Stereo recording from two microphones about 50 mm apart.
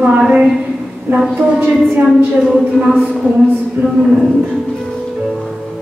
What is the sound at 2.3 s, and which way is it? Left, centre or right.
Speech, centre.